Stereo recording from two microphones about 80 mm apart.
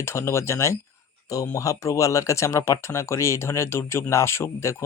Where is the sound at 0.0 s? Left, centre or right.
Left.